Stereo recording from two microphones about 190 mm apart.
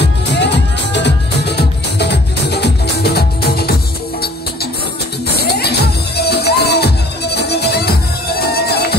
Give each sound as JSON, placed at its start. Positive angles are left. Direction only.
{"t": 0.0, "sound": "music", "side_deg": 65}
{"t": 5.3, "sound": "music", "side_deg": 60}